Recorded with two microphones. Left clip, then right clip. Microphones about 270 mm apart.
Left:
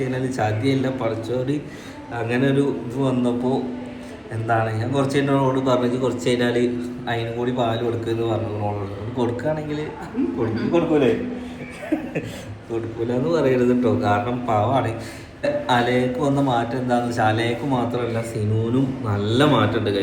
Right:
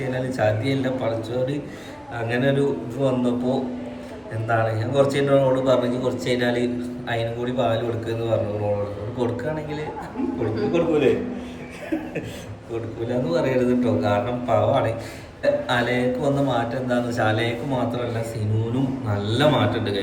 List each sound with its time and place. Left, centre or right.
0.0 s a man's voice: centre
10.7 s a man's voice: centre
13.1 s a man's voice: centre